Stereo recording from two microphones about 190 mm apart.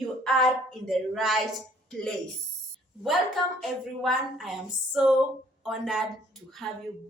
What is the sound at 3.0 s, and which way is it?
A woman's voice, centre (ahead or behind).